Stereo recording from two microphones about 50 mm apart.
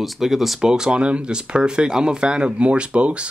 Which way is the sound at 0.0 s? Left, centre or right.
Centre.